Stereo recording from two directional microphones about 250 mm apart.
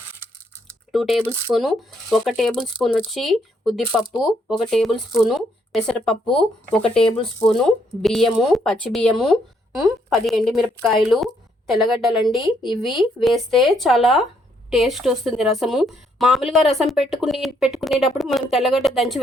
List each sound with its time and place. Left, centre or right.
0.9 s speech: centre